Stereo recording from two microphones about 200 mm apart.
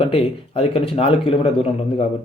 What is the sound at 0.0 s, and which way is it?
Speech, 25° left (ahead or behind).